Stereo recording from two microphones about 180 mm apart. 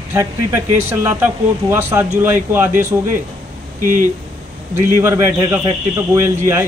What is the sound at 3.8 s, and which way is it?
Speech, 50° right (ahead or behind).